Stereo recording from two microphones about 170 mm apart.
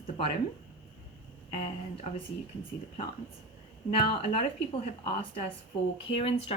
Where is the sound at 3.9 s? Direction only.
30° left (ahead or behind).